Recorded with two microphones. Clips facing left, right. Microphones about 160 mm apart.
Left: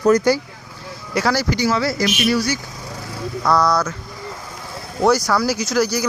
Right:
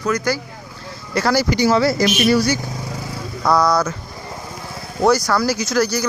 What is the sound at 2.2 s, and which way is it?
Speech, 40° right (ahead or behind).